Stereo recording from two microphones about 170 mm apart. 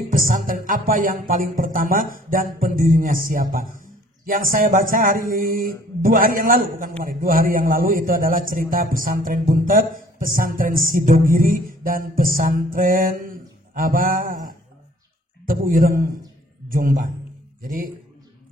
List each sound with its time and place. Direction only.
0.1 s a man's voice: 55° right (ahead or behind)